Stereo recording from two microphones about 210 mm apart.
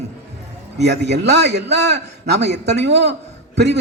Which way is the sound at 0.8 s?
55° right (ahead or behind).